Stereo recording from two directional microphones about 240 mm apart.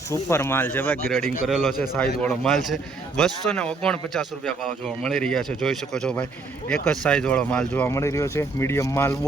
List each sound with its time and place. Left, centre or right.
0.1 s speech: centre